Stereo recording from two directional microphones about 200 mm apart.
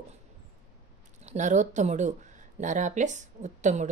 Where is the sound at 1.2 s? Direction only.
35° right (ahead or behind).